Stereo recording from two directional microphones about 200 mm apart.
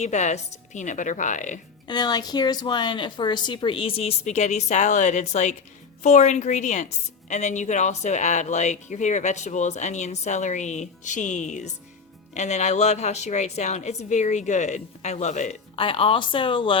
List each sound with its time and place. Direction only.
0.0 s speech: 35° left (ahead or behind)
1.9 s speech: 20° left (ahead or behind)